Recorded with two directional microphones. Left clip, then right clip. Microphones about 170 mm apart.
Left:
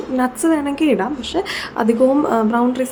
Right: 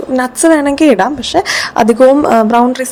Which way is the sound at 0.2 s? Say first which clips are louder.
Right 8 dB; 40° right (ahead or behind).